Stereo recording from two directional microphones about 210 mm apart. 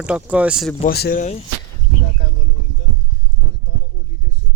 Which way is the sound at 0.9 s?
45° left (ahead or behind).